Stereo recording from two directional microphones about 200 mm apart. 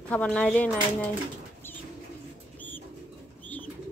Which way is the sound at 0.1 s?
5° left (ahead or behind).